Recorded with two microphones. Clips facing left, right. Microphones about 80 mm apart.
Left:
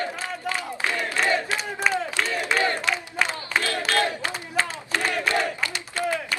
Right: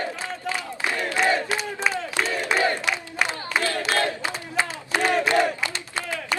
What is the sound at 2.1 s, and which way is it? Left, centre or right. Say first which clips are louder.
Crowd: right 1 dB; right.